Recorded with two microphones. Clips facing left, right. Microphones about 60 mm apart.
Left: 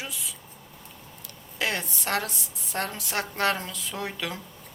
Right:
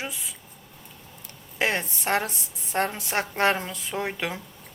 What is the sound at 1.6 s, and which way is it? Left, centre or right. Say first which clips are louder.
Speech: right 3 dB; right.